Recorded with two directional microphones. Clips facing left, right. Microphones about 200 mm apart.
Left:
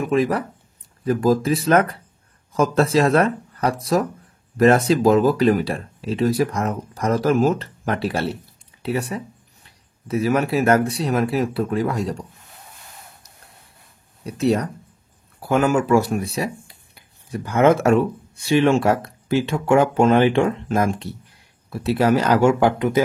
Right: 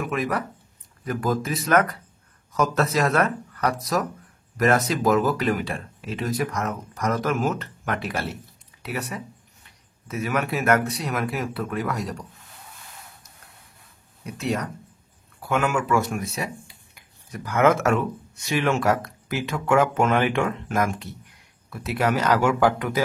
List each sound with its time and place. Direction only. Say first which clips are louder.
0.0 s speech: left 6 dB; 30° left (ahead or behind)
14.2 s speech: left 7 dB; 35° left (ahead or behind)